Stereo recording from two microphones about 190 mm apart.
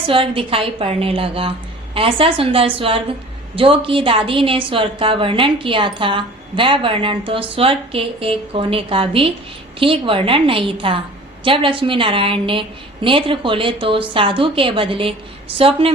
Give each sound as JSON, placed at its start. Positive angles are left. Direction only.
{"t": 0.1, "sound": "a woman's voice", "side_deg": -30}